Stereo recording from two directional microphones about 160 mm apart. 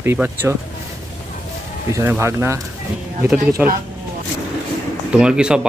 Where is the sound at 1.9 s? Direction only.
15° right (ahead or behind).